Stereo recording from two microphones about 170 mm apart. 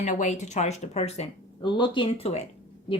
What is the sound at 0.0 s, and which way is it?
Speech, 45° left (ahead or behind).